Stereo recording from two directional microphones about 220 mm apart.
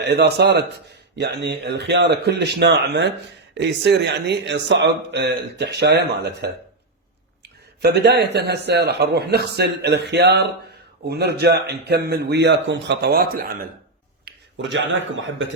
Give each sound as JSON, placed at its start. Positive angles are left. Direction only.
{"t": 0.0, "sound": "speech", "side_deg": -50}
{"t": 7.8, "sound": "speech", "side_deg": -45}
{"t": 14.3, "sound": "speech", "side_deg": -55}